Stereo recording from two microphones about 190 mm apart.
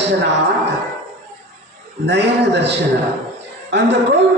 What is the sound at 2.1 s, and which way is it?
Speech, 65° right (ahead or behind).